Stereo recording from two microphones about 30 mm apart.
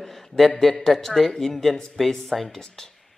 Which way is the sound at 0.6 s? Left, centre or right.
Centre.